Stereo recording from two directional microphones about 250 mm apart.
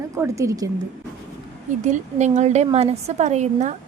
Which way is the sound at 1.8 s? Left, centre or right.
Right.